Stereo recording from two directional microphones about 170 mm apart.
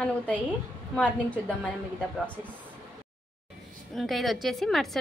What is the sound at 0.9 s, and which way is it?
Speech, 10° left (ahead or behind).